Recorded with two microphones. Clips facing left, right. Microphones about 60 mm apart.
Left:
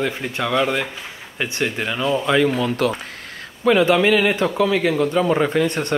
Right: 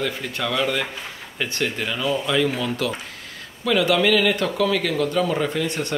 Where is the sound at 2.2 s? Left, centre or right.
Left.